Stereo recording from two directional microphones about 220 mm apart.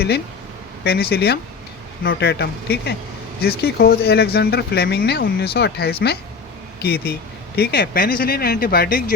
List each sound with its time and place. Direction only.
0.9 s speech: 45° left (ahead or behind)